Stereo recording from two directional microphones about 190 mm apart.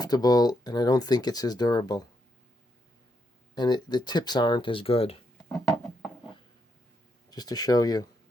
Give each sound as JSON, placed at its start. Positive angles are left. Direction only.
{"t": 0.0, "sound": "speech", "side_deg": 20}
{"t": 3.5, "sound": "speech", "side_deg": 20}
{"t": 7.3, "sound": "speech", "side_deg": 20}